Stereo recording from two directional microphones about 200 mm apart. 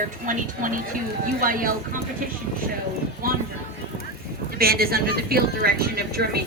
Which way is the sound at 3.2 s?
45° right (ahead or behind).